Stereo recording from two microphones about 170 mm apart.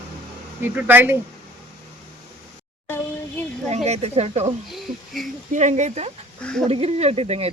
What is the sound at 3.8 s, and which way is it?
Speech, 40° right (ahead or behind).